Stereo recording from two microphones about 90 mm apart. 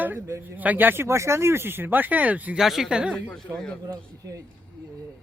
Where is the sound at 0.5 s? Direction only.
20° right (ahead or behind).